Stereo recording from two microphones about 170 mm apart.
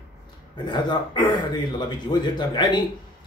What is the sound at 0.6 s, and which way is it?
Speech, 25° left (ahead or behind).